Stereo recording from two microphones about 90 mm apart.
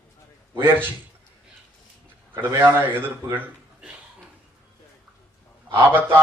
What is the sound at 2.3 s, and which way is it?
Speech, 25° right (ahead or behind).